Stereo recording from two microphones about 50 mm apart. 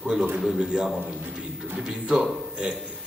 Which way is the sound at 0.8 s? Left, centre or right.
Centre.